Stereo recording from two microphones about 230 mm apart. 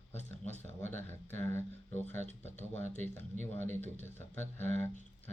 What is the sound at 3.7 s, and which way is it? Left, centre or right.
Speech, centre.